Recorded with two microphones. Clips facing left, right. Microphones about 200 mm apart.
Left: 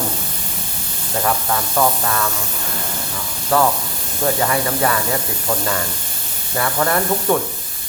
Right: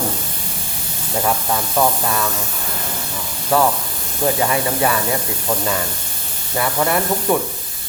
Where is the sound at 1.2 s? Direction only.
10° right (ahead or behind).